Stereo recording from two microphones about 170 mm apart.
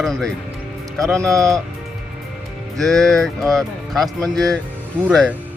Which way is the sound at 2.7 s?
Centre (ahead or behind).